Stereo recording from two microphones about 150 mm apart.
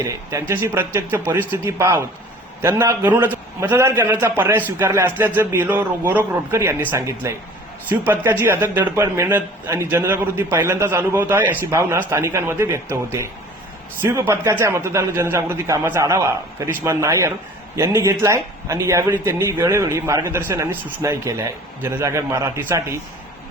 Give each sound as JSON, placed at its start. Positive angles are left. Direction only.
{"t": 0.0, "sound": "a man's voice", "side_deg": -20}